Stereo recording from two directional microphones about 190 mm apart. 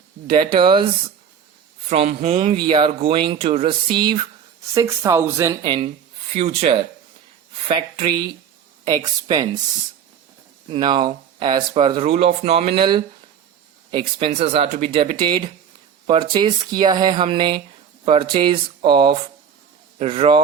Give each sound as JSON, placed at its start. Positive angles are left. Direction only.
{"t": 0.3, "sound": "speech", "side_deg": -25}
{"t": 1.9, "sound": "speech", "side_deg": -35}
{"t": 5.6, "sound": "speech", "side_deg": -25}
{"t": 10.7, "sound": "speech", "side_deg": -25}